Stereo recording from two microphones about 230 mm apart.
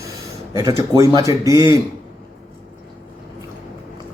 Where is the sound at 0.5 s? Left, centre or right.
Centre.